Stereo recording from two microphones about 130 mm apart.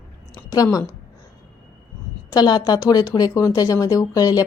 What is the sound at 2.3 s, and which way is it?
Speech, 30° left (ahead or behind).